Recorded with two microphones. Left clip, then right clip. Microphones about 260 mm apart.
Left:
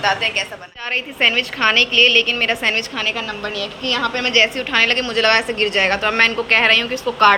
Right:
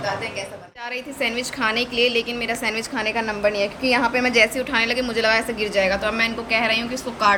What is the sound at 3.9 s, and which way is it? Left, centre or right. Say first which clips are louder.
A woman's voice: left 2 dB; centre.